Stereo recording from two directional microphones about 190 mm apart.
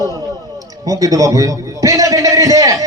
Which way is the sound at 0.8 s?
20° right (ahead or behind).